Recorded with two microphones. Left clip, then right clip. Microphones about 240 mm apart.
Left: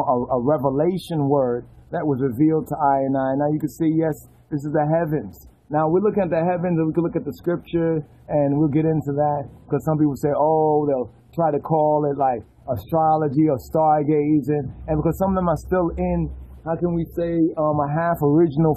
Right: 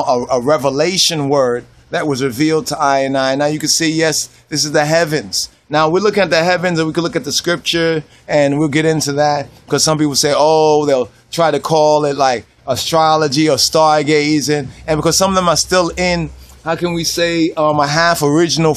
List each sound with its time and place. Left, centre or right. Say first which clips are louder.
0.0 s a man's voice: right 6 dB; right
1.0 s speech: right 7 dB; right
13.4 s speech: right 8 dB; right